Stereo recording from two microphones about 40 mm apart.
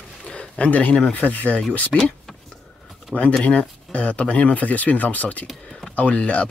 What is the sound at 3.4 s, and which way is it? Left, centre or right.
Speech, left.